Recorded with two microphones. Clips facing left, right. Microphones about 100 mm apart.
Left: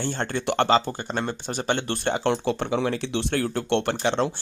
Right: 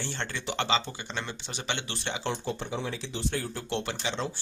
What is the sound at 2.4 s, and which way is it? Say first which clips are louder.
Speech: left 9 dB; 70° left (ahead or behind).